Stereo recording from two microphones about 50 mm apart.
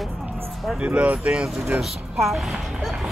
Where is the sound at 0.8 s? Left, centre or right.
Right.